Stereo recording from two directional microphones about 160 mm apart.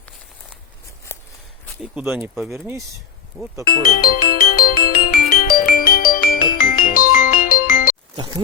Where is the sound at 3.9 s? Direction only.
65° left (ahead or behind).